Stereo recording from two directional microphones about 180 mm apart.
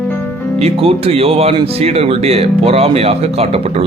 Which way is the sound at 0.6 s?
30° right (ahead or behind).